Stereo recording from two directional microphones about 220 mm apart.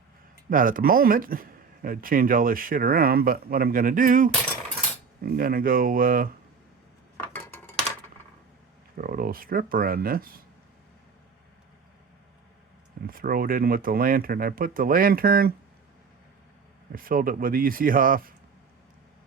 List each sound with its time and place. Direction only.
0.5 s speech: 40° right (ahead or behind)
7.2 s a sound: 10° left (ahead or behind)
9.0 s speech: 40° right (ahead or behind)
13.1 s speech: 40° right (ahead or behind)
16.9 s speech: 40° right (ahead or behind)